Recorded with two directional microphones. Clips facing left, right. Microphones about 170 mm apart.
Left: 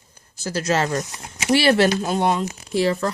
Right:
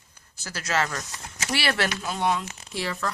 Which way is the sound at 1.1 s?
15° left (ahead or behind).